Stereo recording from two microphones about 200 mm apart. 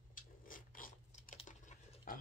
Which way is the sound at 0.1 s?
45° left (ahead or behind).